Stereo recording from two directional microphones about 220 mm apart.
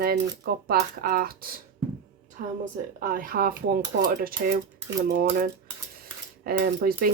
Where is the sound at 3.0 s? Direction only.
40° right (ahead or behind).